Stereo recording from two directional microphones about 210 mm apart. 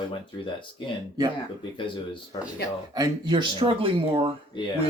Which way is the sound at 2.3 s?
25° left (ahead or behind).